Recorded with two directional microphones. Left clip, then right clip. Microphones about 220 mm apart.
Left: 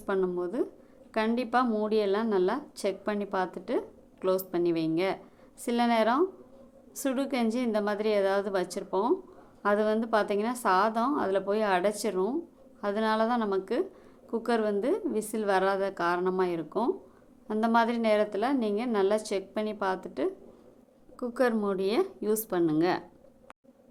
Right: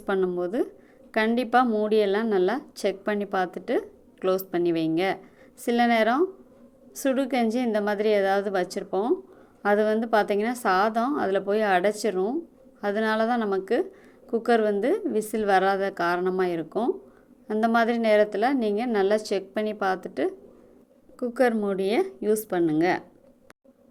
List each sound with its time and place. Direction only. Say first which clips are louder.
0.0 s a woman's voice: right 4 dB; 15° right (ahead or behind)